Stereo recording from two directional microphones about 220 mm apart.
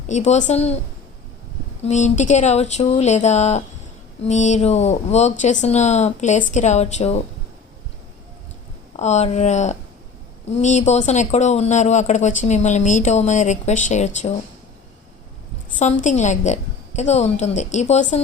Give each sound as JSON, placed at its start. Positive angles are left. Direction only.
{"t": 0.1, "sound": "speech", "side_deg": 30}
{"t": 1.8, "sound": "speech", "side_deg": 30}
{"t": 9.0, "sound": "speech", "side_deg": 30}
{"t": 15.8, "sound": "speech", "side_deg": 35}